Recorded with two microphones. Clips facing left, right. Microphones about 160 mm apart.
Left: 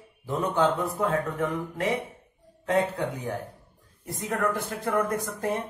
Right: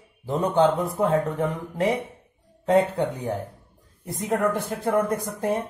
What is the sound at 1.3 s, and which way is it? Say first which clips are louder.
Speech: right 3 dB; 25° right (ahead or behind).